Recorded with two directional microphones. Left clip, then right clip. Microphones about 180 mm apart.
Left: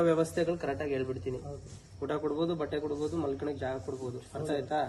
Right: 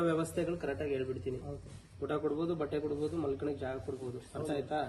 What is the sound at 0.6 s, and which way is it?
Speech, 55° left (ahead or behind).